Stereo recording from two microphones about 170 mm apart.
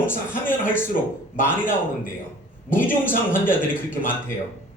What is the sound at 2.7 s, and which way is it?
Speech, 10° left (ahead or behind).